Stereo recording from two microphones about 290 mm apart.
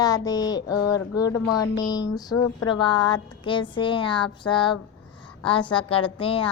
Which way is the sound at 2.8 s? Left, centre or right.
Centre.